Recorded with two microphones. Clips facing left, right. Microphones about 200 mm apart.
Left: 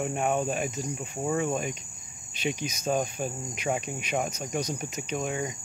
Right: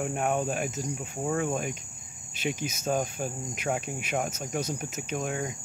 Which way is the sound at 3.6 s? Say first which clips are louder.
Left 1 dB; 5° right (ahead or behind).